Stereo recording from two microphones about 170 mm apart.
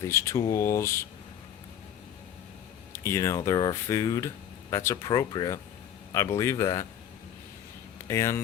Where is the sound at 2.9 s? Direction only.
15° left (ahead or behind).